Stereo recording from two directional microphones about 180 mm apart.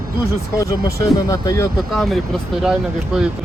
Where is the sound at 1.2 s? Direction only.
15° left (ahead or behind).